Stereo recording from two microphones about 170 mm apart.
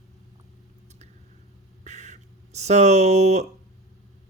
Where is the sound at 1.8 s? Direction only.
45° right (ahead or behind).